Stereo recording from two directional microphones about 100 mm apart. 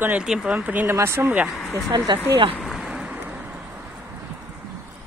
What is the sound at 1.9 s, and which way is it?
Speech, 50° right (ahead or behind).